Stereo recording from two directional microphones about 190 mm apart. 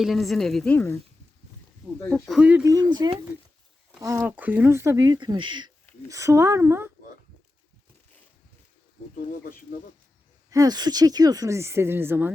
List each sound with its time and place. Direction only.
0.0 s speech: centre (ahead or behind)
2.0 s speech: 10° left (ahead or behind)
2.6 s speech: 20° right (ahead or behind)
4.2 s speech: 10° right (ahead or behind)
9.1 s speech: 50° left (ahead or behind)
10.5 s speech: 20° right (ahead or behind)